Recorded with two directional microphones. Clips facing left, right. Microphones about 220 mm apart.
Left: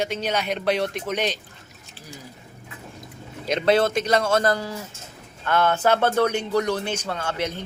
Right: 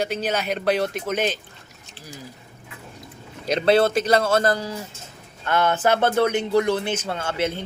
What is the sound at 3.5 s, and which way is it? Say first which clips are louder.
A man's voice: right 2 dB; 30° right (ahead or behind).